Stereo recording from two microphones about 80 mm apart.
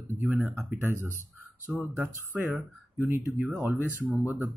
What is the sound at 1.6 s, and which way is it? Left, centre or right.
Speech, right.